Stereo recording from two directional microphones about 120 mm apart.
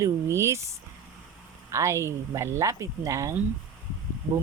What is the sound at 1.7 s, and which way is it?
Speech, 25° right (ahead or behind).